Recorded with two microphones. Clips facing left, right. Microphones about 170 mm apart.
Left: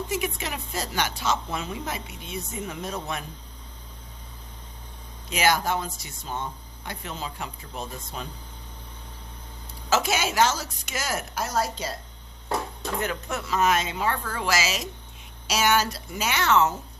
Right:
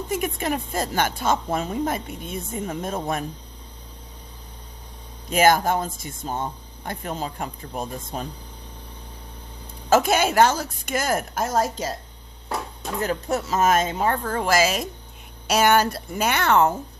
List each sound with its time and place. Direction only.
0.1 s speech: 50° right (ahead or behind)
5.3 s speech: 50° right (ahead or behind)
9.9 s speech: 55° right (ahead or behind)
13.0 s speech: 35° right (ahead or behind); by 16.7 s 55° right (ahead or behind)